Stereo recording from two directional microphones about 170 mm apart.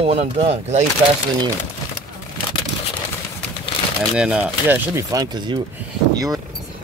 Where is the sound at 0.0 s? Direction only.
40° right (ahead or behind).